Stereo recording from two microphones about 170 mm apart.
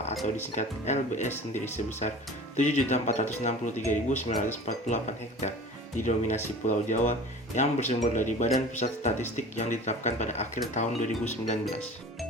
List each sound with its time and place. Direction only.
0.5 s speech: 45° left (ahead or behind)